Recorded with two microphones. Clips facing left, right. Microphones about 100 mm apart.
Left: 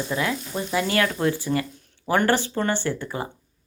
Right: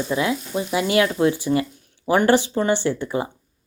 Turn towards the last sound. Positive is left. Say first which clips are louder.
# right 6 dB
turn(degrees=-20)  # may be behind; listen again after turning